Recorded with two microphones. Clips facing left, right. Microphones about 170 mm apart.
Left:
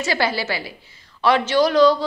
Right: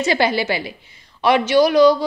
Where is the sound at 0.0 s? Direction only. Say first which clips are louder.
Right 4 dB; 20° right (ahead or behind).